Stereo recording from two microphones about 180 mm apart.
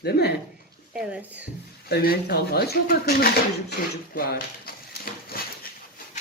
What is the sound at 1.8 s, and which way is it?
Speech, 60° left (ahead or behind).